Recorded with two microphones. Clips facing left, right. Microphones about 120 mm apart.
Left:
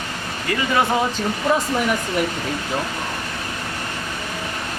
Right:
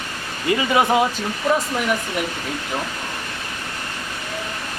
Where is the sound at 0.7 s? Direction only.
15° right (ahead or behind).